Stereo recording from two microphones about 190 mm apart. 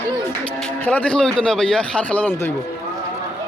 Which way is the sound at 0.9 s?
5° left (ahead or behind).